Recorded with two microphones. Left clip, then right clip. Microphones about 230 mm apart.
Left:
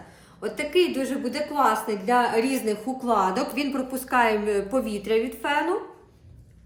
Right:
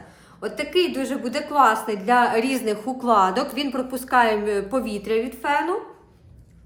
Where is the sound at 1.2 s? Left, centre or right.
Centre.